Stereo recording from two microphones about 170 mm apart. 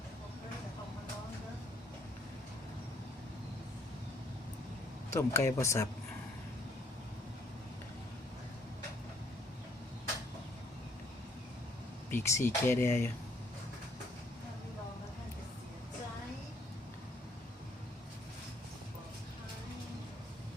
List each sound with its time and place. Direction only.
5.1 s speech: 15° left (ahead or behind)
12.1 s speech: 15° left (ahead or behind)